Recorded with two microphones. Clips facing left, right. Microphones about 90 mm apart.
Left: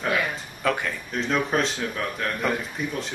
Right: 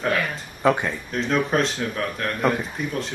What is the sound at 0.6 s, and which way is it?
Speech, 25° right (ahead or behind).